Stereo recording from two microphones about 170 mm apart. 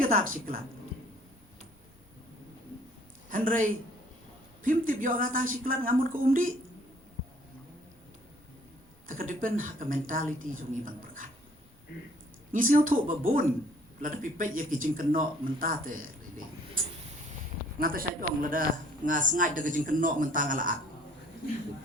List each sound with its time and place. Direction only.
0.0 s a man's voice: 55° right (ahead or behind)
3.2 s a man's voice: 50° right (ahead or behind)
9.0 s a man's voice: 50° right (ahead or behind)
12.5 s a man's voice: 55° right (ahead or behind)
17.7 s a man's voice: 55° right (ahead or behind)